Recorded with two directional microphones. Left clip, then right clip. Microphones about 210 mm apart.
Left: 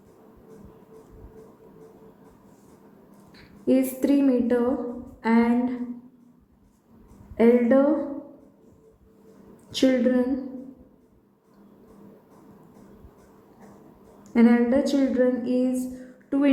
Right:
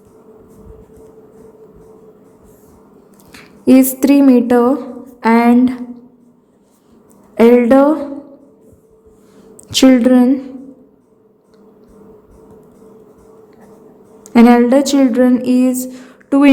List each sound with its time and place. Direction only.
3.3 s a woman's voice: 45° right (ahead or behind)
7.3 s speech: 45° right (ahead or behind)
9.6 s a woman's voice: 45° right (ahead or behind)
14.3 s a woman's voice: 45° right (ahead or behind)